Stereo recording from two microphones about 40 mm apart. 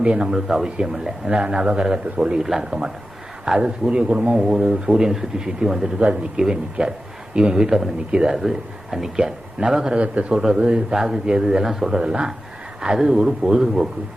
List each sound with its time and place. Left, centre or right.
0.0 s a man's voice: right
0.3 s a man's voice: centre
2.4 s a man's voice: centre; by 4.4 s right
4.4 s a man's voice: centre
8.1 s a man's voice: right
8.4 s speech: centre
10.0 s speech: right
10.3 s a man's voice: centre
10.9 s speech: centre